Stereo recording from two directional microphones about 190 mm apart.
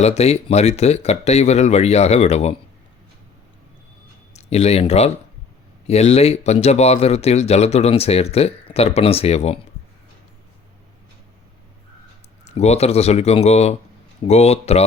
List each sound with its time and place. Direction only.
0.0 s speech: 35° left (ahead or behind)
4.4 s speech: 35° left (ahead or behind)
12.5 s speech: 35° left (ahead or behind)